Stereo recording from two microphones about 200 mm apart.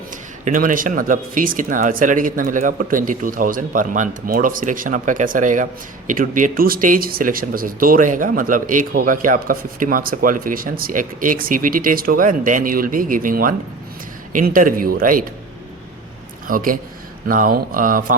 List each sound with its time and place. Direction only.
0.4 s speech: 40° right (ahead or behind)
16.5 s speech: 45° right (ahead or behind)